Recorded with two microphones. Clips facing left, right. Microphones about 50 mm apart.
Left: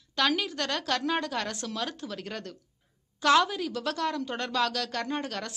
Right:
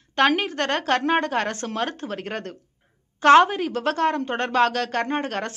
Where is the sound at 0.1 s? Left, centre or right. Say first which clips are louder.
Right 7 dB; right.